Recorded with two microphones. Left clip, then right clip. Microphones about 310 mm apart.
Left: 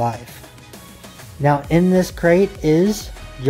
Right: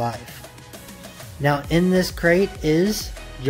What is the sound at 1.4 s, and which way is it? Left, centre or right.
Speech, centre.